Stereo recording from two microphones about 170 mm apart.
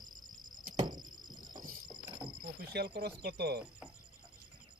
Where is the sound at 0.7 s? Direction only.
25° right (ahead or behind).